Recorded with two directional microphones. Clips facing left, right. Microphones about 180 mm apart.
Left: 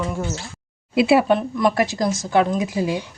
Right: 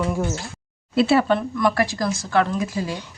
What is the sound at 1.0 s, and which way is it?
Speech, 15° left (ahead or behind).